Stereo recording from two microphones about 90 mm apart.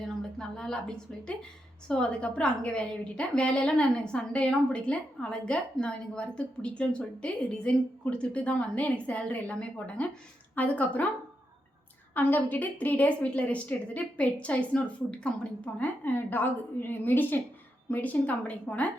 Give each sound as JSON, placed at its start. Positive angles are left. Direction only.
{"t": 0.3, "sound": "a woman's voice", "side_deg": 10}
{"t": 12.1, "sound": "a woman's voice", "side_deg": 20}